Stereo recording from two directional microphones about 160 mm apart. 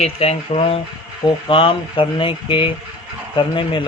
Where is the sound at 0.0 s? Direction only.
40° left (ahead or behind).